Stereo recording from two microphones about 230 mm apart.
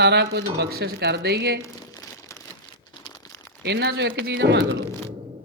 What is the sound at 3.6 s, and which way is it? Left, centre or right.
Speech, right.